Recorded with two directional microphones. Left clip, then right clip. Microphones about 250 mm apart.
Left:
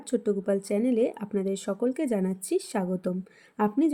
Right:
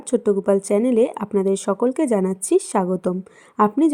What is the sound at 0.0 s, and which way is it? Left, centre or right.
Speech, centre.